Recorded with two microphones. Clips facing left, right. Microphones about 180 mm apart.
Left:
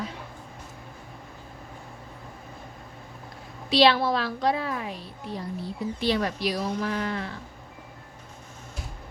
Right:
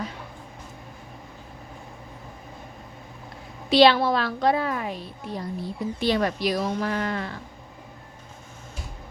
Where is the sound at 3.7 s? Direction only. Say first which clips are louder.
Right 3 dB; 55° right (ahead or behind).